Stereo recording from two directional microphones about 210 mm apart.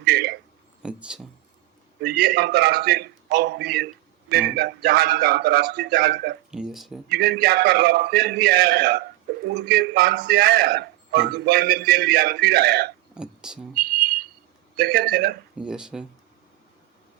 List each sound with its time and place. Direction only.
0.0 s a sound: 50° right (ahead or behind)
0.8 s speech: 5° right (ahead or behind)
2.0 s a man's voice: 50° right (ahead or behind)
6.5 s speech: centre (ahead or behind)
7.1 s a man's voice: 50° right (ahead or behind)
13.1 s speech: 5° right (ahead or behind)
13.7 s a sound: 45° right (ahead or behind)
14.8 s a man's voice: 50° right (ahead or behind)
15.5 s speech: 5° right (ahead or behind)